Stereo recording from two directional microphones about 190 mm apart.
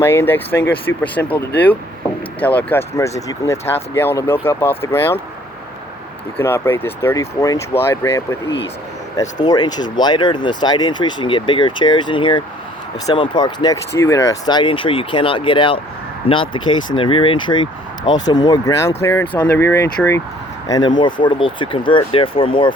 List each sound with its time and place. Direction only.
0.0 s speech: 15° left (ahead or behind)
6.4 s speech: 15° left (ahead or behind)